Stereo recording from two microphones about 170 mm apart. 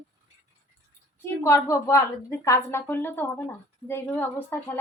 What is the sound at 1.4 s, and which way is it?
Speech, 15° left (ahead or behind).